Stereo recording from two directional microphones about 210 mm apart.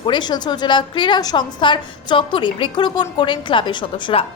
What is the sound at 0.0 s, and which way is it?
A woman's voice, 20° left (ahead or behind).